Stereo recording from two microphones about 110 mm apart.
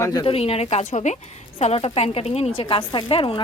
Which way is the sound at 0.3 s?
65° left (ahead or behind).